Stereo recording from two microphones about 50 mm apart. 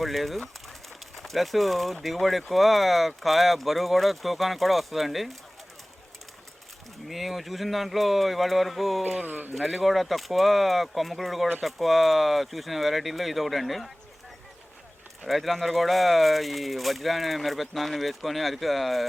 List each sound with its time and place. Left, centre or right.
0.0 s speech: centre
7.1 s speech: centre
9.0 s speech: right
9.6 s speech: centre
15.3 s speech: centre